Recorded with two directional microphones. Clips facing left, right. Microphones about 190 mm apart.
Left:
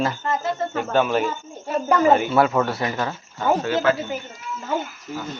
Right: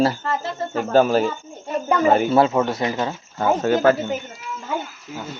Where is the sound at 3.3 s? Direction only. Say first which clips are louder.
Right 2 dB; 45° right (ahead or behind).